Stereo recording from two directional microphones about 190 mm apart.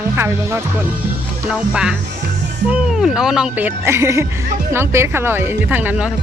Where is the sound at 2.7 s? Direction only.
5° right (ahead or behind).